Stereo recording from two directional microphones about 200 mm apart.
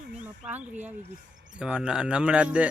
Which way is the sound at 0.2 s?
5° right (ahead or behind).